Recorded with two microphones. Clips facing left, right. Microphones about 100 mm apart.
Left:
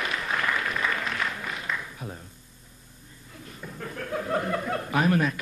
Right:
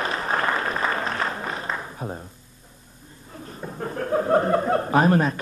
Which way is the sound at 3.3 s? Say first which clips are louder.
Right 6 dB; 40° right (ahead or behind).